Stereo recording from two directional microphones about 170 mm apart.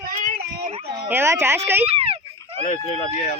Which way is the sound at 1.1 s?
15° right (ahead or behind).